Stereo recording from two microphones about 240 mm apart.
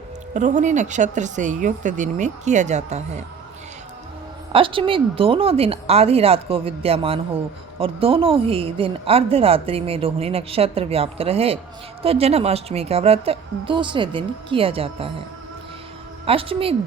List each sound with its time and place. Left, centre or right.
0.3 s speech: right
4.5 s speech: right
16.2 s speech: right